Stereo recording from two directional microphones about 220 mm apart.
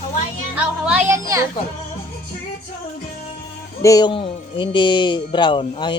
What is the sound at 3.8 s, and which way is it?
Speech, 15° left (ahead or behind).